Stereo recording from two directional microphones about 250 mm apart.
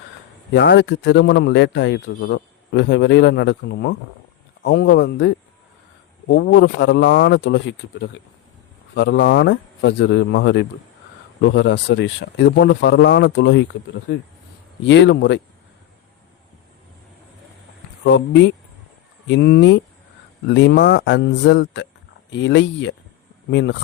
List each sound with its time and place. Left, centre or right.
0.5 s a man's voice: left
6.3 s a man's voice: left
9.0 s a man's voice: left
14.8 s a man's voice: left
18.0 s a man's voice: left